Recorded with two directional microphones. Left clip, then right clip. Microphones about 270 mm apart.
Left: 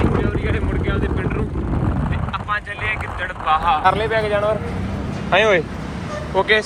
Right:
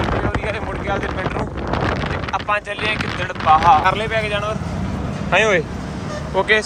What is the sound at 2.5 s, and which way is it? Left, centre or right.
Speech, centre.